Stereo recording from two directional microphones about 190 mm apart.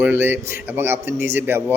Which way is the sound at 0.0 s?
10° right (ahead or behind).